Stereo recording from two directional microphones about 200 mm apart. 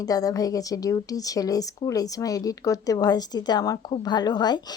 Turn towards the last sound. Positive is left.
turn(degrees=20)  # may be behind; listen again after turning